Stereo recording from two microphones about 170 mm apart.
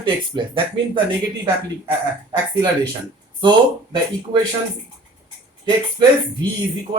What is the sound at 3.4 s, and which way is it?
Speech, 30° right (ahead or behind).